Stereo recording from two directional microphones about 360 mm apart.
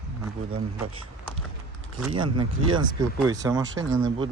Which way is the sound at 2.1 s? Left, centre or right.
Centre.